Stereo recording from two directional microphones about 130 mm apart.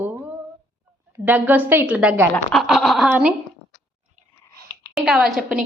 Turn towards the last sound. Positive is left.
turn(degrees=-5)  # may be behind; listen again after turning